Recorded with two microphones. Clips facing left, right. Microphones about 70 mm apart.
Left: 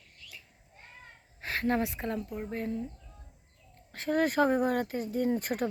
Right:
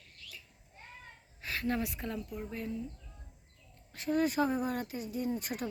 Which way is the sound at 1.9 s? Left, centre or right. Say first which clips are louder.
Left 5 dB; left.